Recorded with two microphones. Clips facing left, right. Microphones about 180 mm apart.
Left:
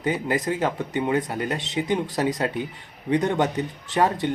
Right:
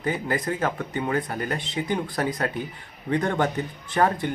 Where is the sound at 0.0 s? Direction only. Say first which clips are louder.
Left 2 dB; 20° left (ahead or behind).